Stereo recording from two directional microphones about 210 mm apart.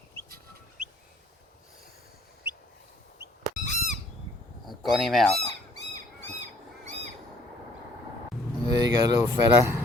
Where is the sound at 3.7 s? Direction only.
35° left (ahead or behind).